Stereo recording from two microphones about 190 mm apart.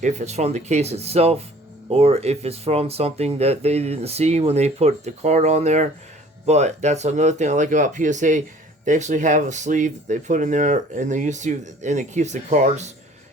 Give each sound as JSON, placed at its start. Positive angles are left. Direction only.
{"t": 0.0, "sound": "speech", "side_deg": -35}